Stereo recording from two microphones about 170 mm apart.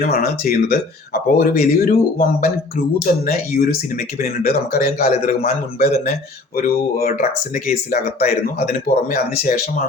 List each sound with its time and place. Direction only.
0.0 s speech: 60° left (ahead or behind)